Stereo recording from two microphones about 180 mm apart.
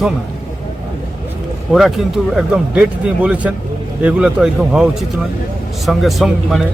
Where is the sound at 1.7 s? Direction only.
Centre (ahead or behind).